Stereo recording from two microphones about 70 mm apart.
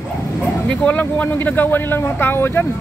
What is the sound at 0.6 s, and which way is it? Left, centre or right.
Speech, left.